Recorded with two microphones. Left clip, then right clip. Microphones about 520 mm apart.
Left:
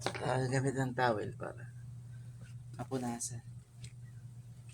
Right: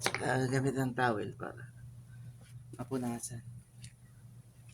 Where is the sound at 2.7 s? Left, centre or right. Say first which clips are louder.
Right 1 dB; right.